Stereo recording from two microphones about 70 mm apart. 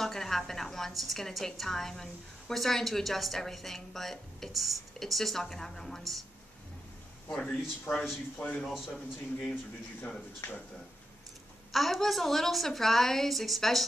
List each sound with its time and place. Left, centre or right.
0.0 s a woman's voice: centre
7.3 s a man's voice: centre
10.4 s speech: left
11.7 s a woman's voice: centre